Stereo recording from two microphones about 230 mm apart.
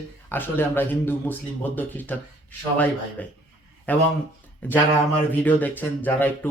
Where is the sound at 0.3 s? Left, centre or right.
Centre.